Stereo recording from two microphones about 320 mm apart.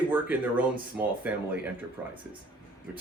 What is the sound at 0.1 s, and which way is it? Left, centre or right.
Speech, centre.